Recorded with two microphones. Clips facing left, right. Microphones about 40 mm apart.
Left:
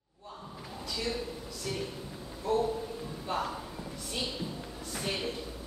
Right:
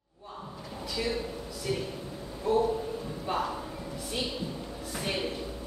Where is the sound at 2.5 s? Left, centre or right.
Centre.